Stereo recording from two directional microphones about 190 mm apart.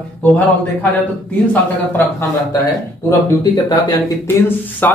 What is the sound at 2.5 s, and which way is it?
A man's voice, 15° left (ahead or behind).